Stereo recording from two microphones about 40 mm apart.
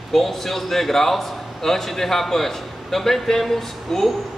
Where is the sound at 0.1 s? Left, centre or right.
Centre.